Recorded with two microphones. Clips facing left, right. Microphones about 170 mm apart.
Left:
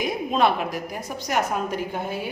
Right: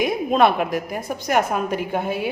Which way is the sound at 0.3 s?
55° right (ahead or behind).